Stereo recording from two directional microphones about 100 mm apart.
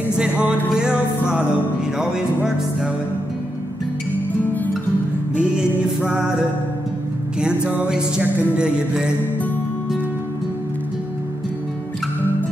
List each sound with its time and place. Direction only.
0.2 s music: 10° right (ahead or behind)
5.3 s music: 10° right (ahead or behind)